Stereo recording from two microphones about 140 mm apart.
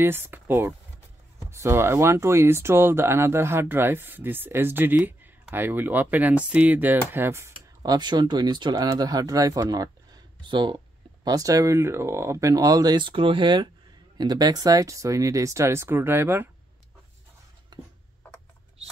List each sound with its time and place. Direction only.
0.0 s speech: 15° right (ahead or behind)